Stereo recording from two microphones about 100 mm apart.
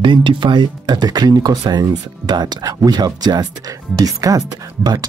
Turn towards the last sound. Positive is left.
turn(degrees=-40)  # may be behind; listen again after turning